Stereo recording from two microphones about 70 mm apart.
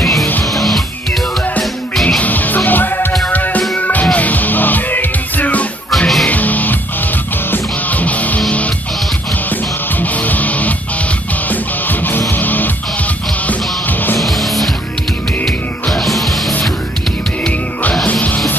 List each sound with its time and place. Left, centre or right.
0.0 s music: centre
2.0 s music: left
5.9 s music: centre
6.2 s music: left
9.9 s music: left
11.9 s music: left
14.2 s music: centre